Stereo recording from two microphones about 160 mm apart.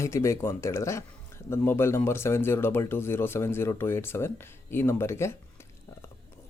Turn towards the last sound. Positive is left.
turn(degrees=15)  # may be behind; listen again after turning